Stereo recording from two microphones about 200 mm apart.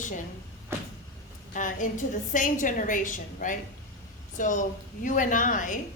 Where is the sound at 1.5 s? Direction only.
40° left (ahead or behind).